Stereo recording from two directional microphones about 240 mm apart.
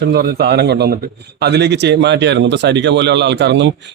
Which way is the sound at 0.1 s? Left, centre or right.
Right.